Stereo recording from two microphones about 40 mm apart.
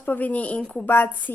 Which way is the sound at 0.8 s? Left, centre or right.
Left.